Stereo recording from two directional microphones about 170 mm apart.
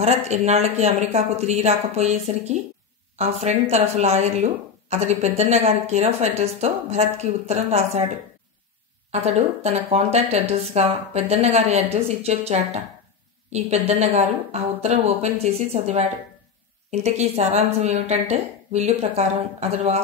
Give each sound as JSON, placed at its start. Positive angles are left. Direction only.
{"t": 0.0, "sound": "a woman's voice", "side_deg": -40}
{"t": 9.1, "sound": "a woman's voice", "side_deg": -40}